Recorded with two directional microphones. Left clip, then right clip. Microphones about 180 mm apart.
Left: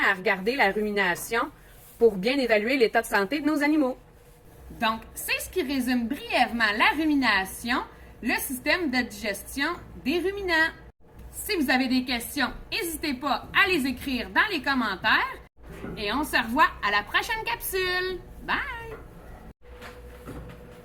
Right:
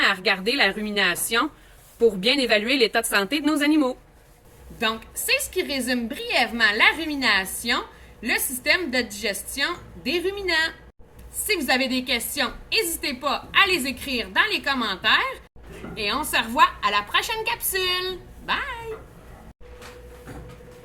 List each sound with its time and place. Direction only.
0.3 s speech: 15° right (ahead or behind)
2.2 s speech: 10° right (ahead or behind)
4.8 s a woman's voice: 25° right (ahead or behind)